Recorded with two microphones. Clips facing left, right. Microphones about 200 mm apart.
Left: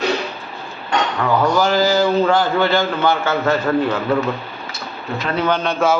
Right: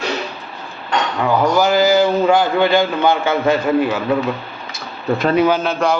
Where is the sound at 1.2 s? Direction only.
10° right (ahead or behind).